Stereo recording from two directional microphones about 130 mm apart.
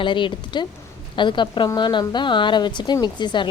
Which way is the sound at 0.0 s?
40° left (ahead or behind).